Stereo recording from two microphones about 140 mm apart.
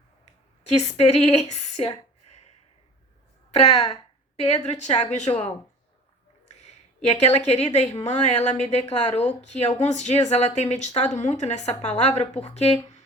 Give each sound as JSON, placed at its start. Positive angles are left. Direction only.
{"t": 0.8, "sound": "speech", "side_deg": 55}
{"t": 3.6, "sound": "speech", "side_deg": 50}
{"t": 6.5, "sound": "speech", "side_deg": 55}